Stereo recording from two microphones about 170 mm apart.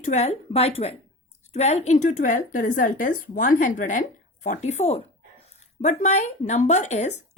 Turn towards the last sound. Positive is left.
turn(degrees=40)  # may be behind; listen again after turning